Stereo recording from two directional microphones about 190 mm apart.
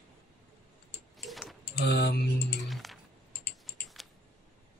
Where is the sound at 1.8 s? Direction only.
65° left (ahead or behind).